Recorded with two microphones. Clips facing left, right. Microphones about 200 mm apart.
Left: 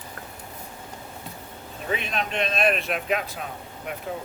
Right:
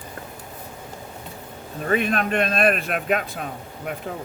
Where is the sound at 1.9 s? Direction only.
50° right (ahead or behind).